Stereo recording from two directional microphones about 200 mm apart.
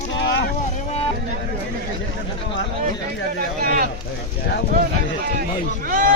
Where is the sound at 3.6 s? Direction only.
45° right (ahead or behind).